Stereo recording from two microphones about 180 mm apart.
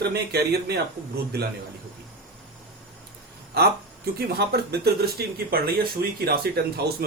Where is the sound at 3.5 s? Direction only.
60° right (ahead or behind).